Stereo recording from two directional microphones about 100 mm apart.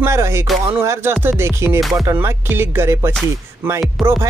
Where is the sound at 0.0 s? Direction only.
25° right (ahead or behind).